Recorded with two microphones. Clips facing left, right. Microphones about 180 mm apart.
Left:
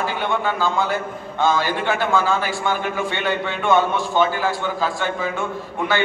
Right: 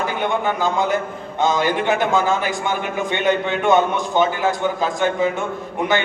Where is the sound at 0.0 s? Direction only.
20° right (ahead or behind).